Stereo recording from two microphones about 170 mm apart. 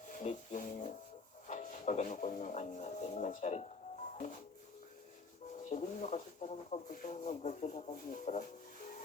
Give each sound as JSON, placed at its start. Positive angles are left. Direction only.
{"t": 0.2, "sound": "speech", "side_deg": 45}
{"t": 5.6, "sound": "speech", "side_deg": 45}